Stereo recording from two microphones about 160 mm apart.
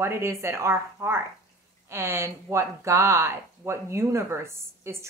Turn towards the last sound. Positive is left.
turn(degrees=-15)  # may be behind; listen again after turning